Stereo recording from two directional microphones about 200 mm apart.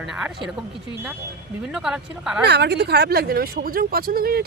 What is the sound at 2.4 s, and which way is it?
Speech, 55° right (ahead or behind).